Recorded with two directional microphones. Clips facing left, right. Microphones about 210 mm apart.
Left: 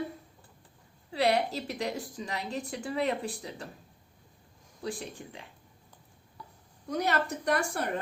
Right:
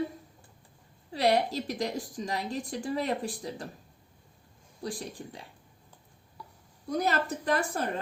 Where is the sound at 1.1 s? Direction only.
40° right (ahead or behind).